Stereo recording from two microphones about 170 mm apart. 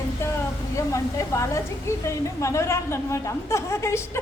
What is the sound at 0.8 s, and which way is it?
A woman's voice, 15° left (ahead or behind).